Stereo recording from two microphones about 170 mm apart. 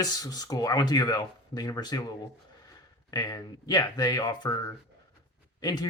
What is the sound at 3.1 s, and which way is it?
Speech, 20° left (ahead or behind).